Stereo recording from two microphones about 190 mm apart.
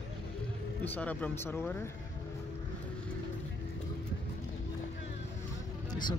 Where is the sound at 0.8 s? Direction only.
10° left (ahead or behind).